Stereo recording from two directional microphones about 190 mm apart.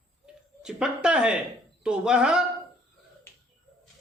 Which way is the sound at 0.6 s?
5° right (ahead or behind).